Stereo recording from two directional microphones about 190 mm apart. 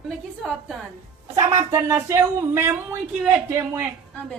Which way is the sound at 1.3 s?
15° right (ahead or behind).